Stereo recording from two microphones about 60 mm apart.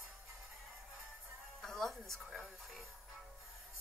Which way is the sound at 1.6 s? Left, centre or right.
Centre.